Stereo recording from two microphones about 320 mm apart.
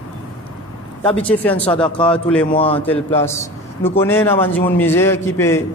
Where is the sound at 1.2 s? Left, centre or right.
Centre.